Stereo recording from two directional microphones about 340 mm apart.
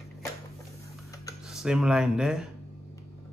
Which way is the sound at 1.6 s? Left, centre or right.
Centre.